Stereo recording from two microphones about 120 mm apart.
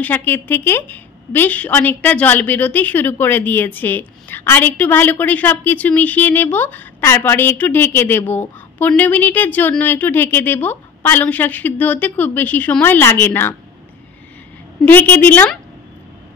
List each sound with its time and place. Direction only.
0.0 s a woman's voice: 15° left (ahead or behind)
14.9 s a woman's voice: 15° left (ahead or behind)